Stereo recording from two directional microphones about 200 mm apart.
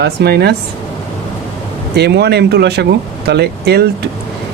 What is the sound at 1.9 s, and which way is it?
Speech, 55° right (ahead or behind).